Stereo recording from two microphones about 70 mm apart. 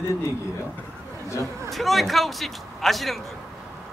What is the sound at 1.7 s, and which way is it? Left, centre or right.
A man's voice, centre.